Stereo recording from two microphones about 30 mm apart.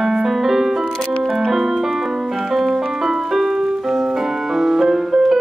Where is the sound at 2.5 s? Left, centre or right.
Centre.